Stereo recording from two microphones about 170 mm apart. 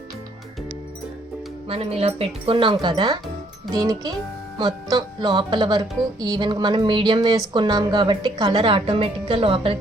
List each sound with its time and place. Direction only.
1.6 s a woman's voice: 35° right (ahead or behind)